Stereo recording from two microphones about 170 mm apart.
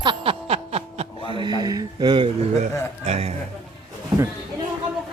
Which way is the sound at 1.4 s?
25° right (ahead or behind).